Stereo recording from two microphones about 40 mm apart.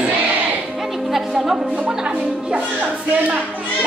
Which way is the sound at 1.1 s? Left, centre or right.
Centre.